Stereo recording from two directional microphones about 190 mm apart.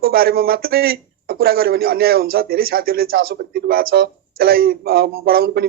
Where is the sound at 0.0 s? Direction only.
55° right (ahead or behind).